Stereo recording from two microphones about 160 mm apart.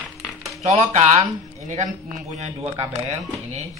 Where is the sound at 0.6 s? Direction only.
45° right (ahead or behind).